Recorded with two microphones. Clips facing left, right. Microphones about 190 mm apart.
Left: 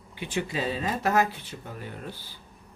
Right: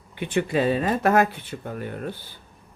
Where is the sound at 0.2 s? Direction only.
55° right (ahead or behind).